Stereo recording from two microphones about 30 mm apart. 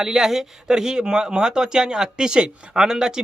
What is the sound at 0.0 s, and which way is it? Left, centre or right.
Speech, centre.